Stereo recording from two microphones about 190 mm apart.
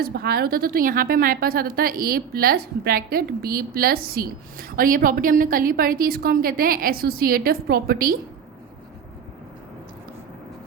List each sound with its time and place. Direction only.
0.0 s a woman's voice: 55° right (ahead or behind)